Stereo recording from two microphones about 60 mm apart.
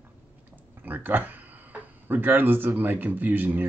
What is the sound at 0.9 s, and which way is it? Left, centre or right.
Speech, right.